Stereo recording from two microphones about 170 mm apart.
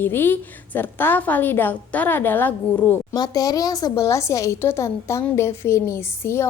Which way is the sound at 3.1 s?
20° left (ahead or behind).